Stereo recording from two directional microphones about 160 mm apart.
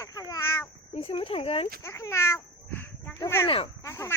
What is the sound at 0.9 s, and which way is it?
Speech, 35° left (ahead or behind).